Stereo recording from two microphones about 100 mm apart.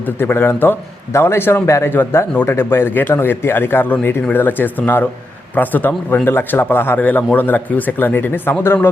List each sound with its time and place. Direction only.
0.0 s speech: 20° left (ahead or behind)